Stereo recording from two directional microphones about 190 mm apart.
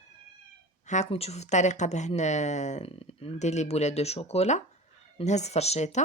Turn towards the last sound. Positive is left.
turn(degrees=35)  # may be behind; listen again after turning